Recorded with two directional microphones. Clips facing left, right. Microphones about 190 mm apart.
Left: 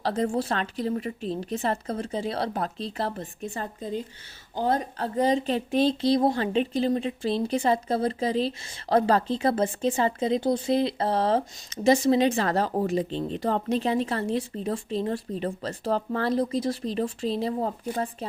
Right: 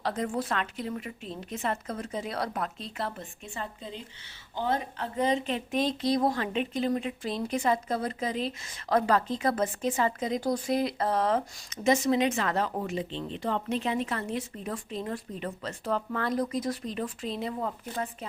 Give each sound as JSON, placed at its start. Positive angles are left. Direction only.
{"t": 0.0, "sound": "speech", "side_deg": 30}